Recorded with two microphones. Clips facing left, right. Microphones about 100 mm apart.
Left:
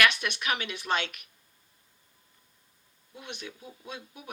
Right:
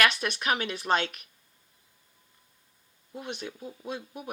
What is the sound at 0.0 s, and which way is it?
Speech, 40° right (ahead or behind).